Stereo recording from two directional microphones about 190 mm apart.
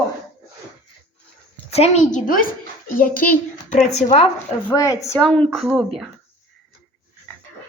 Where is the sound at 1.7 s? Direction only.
35° left (ahead or behind).